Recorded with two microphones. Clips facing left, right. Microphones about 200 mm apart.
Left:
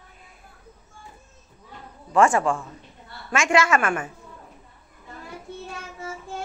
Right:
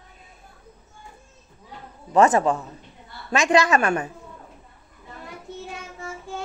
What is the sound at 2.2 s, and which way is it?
A woman's voice, 40° right (ahead or behind).